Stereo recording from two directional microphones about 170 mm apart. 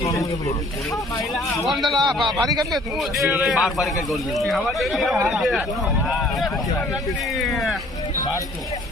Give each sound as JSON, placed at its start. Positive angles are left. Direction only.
{"t": 0.0, "sound": "speech", "side_deg": 20}
{"t": 1.3, "sound": "speech", "side_deg": 0}
{"t": 1.9, "sound": "speech", "side_deg": -25}
{"t": 2.1, "sound": "speech", "side_deg": 0}